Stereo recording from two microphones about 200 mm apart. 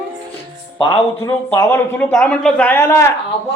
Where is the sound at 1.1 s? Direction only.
15° left (ahead or behind).